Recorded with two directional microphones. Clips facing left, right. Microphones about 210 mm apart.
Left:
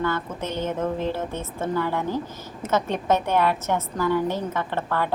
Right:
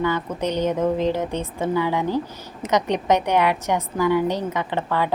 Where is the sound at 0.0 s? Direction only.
15° right (ahead or behind).